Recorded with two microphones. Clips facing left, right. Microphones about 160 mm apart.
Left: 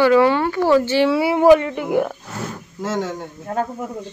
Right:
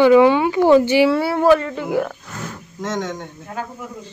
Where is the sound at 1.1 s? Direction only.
15° left (ahead or behind).